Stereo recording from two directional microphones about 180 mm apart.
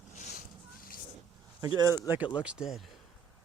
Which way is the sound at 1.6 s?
20° right (ahead or behind).